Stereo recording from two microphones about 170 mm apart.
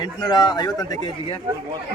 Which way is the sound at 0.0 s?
25° left (ahead or behind).